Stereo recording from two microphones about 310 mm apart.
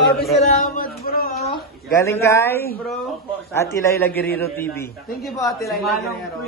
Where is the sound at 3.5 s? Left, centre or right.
Centre.